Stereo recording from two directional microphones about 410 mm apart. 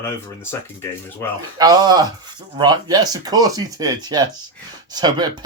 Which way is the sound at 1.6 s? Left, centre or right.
Centre.